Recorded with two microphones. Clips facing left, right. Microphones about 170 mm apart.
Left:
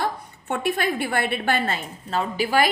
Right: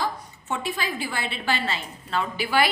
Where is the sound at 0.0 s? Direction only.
60° left (ahead or behind).